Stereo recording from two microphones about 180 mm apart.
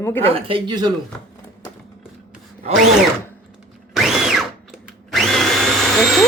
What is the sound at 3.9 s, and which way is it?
Drill, centre (ahead or behind).